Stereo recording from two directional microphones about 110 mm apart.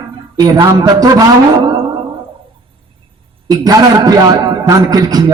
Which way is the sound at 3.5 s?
35° right (ahead or behind).